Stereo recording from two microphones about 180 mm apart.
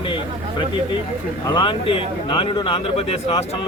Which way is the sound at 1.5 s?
25° left (ahead or behind).